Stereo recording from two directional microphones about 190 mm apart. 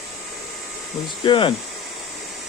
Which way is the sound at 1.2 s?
25° left (ahead or behind).